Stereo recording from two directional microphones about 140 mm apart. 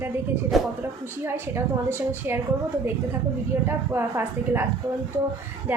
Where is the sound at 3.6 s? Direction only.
15° right (ahead or behind).